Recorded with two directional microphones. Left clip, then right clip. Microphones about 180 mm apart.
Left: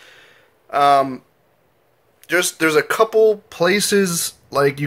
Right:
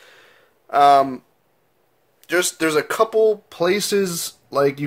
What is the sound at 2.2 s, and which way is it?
Speech, 20° right (ahead or behind).